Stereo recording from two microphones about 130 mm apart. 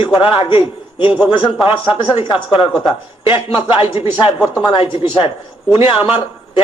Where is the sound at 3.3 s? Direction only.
40° left (ahead or behind).